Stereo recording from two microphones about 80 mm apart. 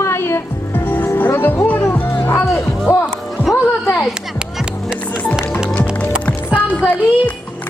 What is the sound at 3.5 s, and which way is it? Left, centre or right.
Music, centre.